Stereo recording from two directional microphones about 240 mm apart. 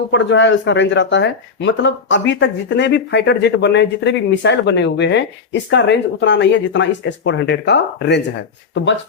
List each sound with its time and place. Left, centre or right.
0.1 s speech: left